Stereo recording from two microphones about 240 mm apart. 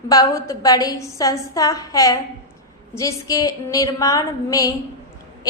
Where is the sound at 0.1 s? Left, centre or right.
Centre.